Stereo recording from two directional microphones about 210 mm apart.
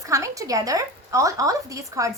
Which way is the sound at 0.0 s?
15° right (ahead or behind).